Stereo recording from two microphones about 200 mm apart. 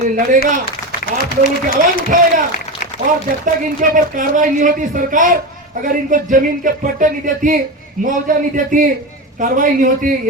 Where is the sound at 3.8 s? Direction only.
40° right (ahead or behind).